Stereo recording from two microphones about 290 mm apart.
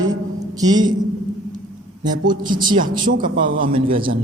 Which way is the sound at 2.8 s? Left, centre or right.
Right.